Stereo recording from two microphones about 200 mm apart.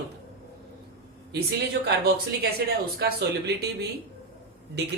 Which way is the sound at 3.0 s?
55° right (ahead or behind).